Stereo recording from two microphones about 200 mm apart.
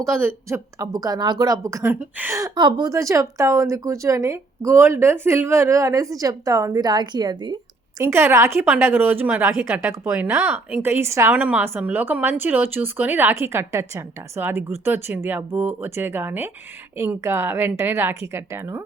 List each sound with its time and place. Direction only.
0.0 s a woman's voice: 10° right (ahead or behind)